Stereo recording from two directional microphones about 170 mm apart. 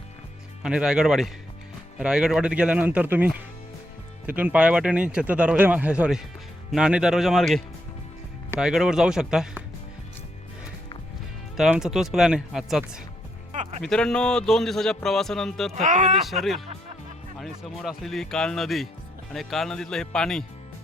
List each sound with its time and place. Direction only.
0.6 s speech: 5° right (ahead or behind)
11.5 s speech: centre (ahead or behind)
13.5 s music: 40° right (ahead or behind)
13.8 s speech: 5° left (ahead or behind)
15.7 s speech: 50° right (ahead or behind)
16.2 s speech: centre (ahead or behind)